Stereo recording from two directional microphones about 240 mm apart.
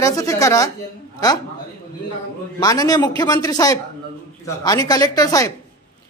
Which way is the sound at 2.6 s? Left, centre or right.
Centre.